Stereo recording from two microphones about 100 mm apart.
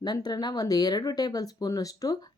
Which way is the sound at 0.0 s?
45° left (ahead or behind).